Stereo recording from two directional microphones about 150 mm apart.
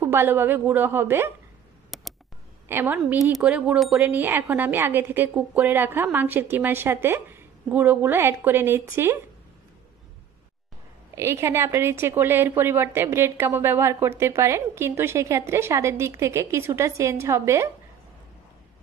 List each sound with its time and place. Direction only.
0.0 s a woman's voice: 15° right (ahead or behind)
1.9 s a sound: centre (ahead or behind)
2.7 s a woman's voice: 10° right (ahead or behind)
11.1 s a woman's voice: 20° right (ahead or behind)